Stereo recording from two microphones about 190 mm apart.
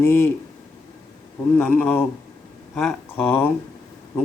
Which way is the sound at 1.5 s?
10° left (ahead or behind).